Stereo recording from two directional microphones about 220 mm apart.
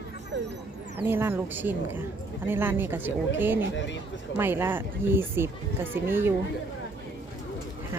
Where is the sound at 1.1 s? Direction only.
10° right (ahead or behind).